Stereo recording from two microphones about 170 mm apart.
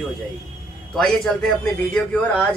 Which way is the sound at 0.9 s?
5° left (ahead or behind).